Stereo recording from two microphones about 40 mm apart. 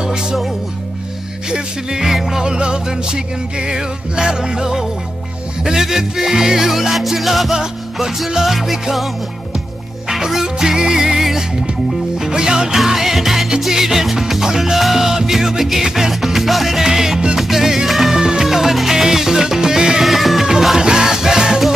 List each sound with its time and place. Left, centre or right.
0.0 s music: centre
1.5 s music: centre
2.5 s music: right; by 8.7 s centre
10.0 s music: centre
12.7 s music: centre
18.1 s music: centre
20.1 s music: centre
20.8 s music: centre